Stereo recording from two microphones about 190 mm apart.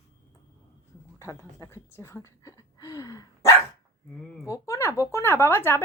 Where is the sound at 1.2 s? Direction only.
15° left (ahead or behind).